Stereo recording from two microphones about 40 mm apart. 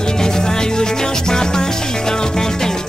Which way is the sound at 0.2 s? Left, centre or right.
Centre.